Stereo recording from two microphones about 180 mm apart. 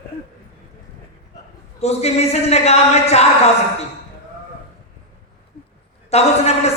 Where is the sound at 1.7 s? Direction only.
35° left (ahead or behind).